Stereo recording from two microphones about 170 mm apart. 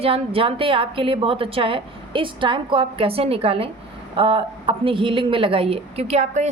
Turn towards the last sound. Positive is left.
turn(degrees=-40)  # may be behind; listen again after turning